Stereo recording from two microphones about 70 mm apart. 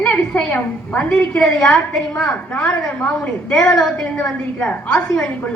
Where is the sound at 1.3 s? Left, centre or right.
Centre.